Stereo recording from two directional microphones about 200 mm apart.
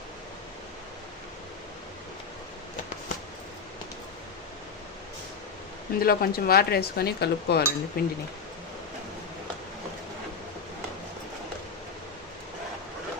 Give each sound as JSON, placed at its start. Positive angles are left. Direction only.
{"t": 6.0, "sound": "speech", "side_deg": 50}